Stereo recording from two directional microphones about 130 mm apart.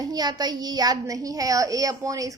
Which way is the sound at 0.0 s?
30° right (ahead or behind).